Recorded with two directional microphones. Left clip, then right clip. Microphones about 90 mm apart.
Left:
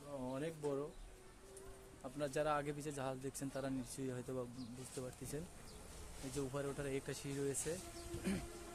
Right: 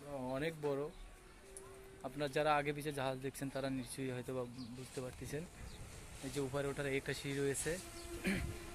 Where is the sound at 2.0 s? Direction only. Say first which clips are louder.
Right 3 dB; centre (ahead or behind).